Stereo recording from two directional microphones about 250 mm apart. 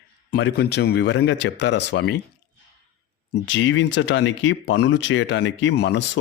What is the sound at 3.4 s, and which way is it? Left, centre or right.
Speech, left.